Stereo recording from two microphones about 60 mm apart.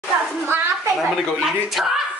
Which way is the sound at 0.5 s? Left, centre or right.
Right.